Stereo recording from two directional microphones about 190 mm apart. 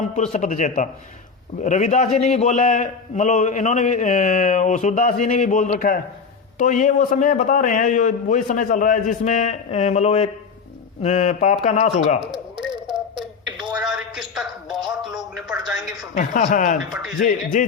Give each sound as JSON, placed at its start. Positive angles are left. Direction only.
{"t": 0.0, "sound": "a man's voice", "side_deg": 40}
{"t": 12.5, "sound": "a sound", "side_deg": -5}
{"t": 15.4, "sound": "a woman's voice", "side_deg": 0}
{"t": 16.1, "sound": "a man's voice", "side_deg": 40}
{"t": 16.9, "sound": "a woman's voice", "side_deg": 0}
{"t": 17.2, "sound": "a man's voice", "side_deg": 40}